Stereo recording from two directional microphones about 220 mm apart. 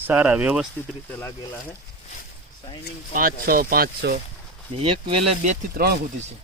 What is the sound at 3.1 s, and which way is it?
Speech, 40° right (ahead or behind).